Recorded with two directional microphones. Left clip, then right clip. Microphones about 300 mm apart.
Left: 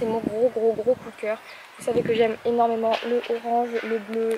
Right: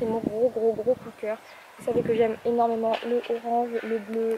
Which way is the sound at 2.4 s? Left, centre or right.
Centre.